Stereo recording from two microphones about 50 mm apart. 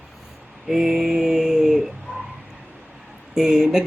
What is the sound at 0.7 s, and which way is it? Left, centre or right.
Speech, centre.